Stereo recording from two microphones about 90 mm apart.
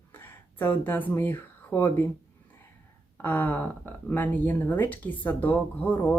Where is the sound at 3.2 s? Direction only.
20° left (ahead or behind).